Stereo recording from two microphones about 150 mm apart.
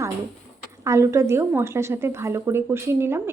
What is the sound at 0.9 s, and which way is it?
A woman's voice, 20° right (ahead or behind).